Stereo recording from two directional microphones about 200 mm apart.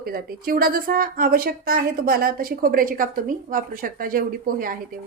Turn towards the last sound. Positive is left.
turn(degrees=-45)  # may be behind; listen again after turning